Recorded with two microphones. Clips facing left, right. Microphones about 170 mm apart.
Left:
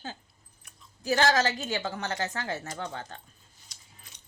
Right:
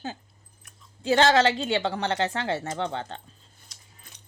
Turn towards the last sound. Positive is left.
turn(degrees=-25)  # may be behind; listen again after turning